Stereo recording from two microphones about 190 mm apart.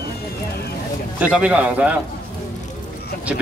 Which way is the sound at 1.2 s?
5° right (ahead or behind).